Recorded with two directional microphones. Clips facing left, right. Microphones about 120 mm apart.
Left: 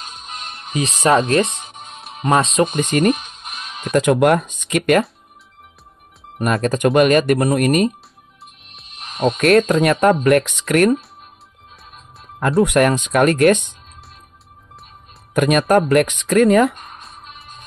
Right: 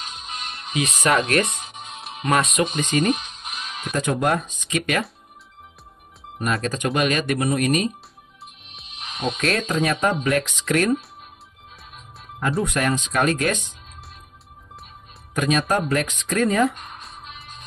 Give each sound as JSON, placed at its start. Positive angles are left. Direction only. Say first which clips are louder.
{"t": 0.7, "sound": "speech", "louder": "left 5 dB", "side_deg": 30}
{"t": 2.6, "sound": "speech", "louder": "left 5 dB", "side_deg": 50}
{"t": 3.4, "sound": "music", "louder": "left 3 dB", "side_deg": 0}
{"t": 3.9, "sound": "speech", "louder": "left 8 dB", "side_deg": 70}
{"t": 6.3, "sound": "speech", "louder": "left 6 dB", "side_deg": 50}
{"t": 8.8, "sound": "music", "louder": "left 1 dB", "side_deg": 45}
{"t": 9.2, "sound": "speech", "louder": "left 10 dB", "side_deg": 50}
{"t": 12.6, "sound": "speech", "louder": "left 8 dB", "side_deg": 60}
{"t": 15.3, "sound": "speech", "louder": "left 7 dB", "side_deg": 60}
{"t": 16.8, "sound": "music", "louder": "left 1 dB", "side_deg": 0}